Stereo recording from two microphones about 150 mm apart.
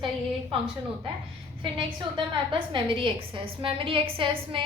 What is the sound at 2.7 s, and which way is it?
A woman's voice, 35° right (ahead or behind).